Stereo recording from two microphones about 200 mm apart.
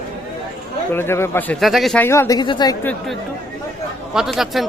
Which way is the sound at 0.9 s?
10° left (ahead or behind).